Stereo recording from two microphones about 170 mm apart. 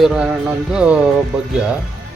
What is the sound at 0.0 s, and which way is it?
Speech, centre (ahead or behind).